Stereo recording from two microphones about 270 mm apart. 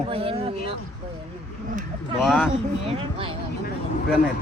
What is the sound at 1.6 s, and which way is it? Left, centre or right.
Speech, right.